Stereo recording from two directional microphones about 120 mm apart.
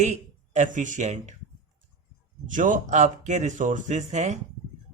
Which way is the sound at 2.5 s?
90° right.